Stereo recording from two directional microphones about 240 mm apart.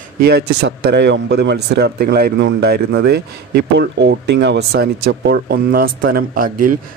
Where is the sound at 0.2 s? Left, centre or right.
Right.